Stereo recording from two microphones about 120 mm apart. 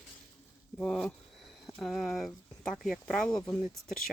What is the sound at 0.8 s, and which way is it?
Speech, 5° left (ahead or behind).